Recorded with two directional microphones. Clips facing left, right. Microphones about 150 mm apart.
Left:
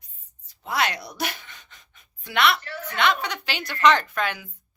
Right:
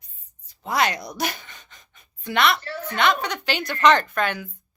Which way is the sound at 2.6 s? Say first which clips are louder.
Right 4 dB; 35° right (ahead or behind).